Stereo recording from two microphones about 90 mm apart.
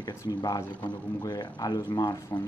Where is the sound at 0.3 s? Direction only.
50° left (ahead or behind).